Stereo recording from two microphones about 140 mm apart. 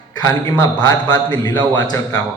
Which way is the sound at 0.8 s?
30° left (ahead or behind).